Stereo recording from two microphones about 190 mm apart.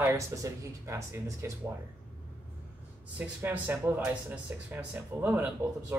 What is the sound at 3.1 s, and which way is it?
Speech, 10° right (ahead or behind).